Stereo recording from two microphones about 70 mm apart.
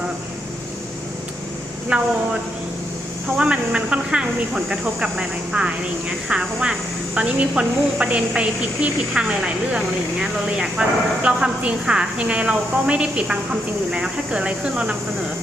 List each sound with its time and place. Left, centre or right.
1.9 s speech: centre
3.3 s speech: centre